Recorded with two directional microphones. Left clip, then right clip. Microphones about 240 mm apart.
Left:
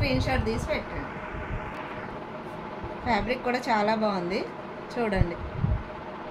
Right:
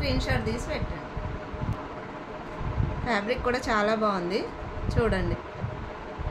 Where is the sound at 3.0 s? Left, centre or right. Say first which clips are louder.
Even; centre.